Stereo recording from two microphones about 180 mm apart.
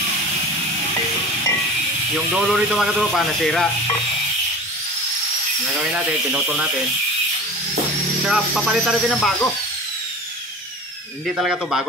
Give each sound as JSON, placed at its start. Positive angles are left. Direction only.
{"t": 2.1, "sound": "speech", "side_deg": 0}
{"t": 5.8, "sound": "speech", "side_deg": -5}
{"t": 8.3, "sound": "speech", "side_deg": 0}
{"t": 11.3, "sound": "speech", "side_deg": -5}